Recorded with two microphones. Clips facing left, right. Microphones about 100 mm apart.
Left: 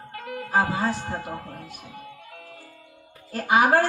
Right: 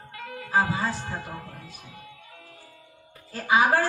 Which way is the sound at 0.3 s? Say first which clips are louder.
Left 1 dB; 50° left (ahead or behind).